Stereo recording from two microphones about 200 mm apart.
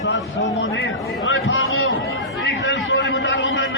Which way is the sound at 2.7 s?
65° left (ahead or behind).